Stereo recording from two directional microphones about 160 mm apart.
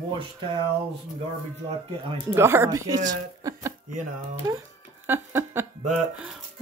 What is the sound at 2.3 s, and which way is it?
Speech, 15° right (ahead or behind).